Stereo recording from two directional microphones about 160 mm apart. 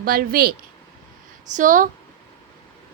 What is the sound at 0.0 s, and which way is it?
Speech, 70° right (ahead or behind).